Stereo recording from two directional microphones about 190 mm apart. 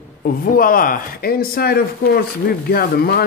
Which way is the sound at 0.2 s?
50° left (ahead or behind).